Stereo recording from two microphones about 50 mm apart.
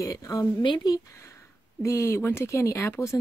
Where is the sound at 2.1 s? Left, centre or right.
Left.